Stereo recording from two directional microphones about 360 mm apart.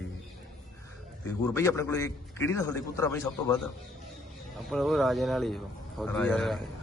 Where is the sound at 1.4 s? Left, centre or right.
Centre.